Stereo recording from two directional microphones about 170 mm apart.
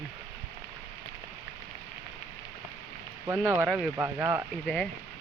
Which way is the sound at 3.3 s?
15° right (ahead or behind).